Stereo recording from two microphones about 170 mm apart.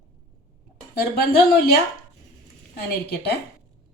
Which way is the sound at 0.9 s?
65° left (ahead or behind).